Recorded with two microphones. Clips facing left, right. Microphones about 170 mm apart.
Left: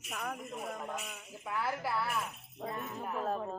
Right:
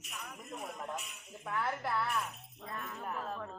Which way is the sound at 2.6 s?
25° left (ahead or behind).